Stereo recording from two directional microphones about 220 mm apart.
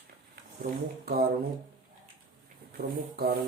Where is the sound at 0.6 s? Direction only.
45° right (ahead or behind).